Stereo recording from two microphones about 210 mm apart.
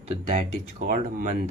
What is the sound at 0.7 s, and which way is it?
Speech, 40° right (ahead or behind).